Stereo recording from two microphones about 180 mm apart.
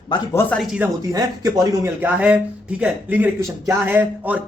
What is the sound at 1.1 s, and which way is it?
A man's voice, 20° right (ahead or behind).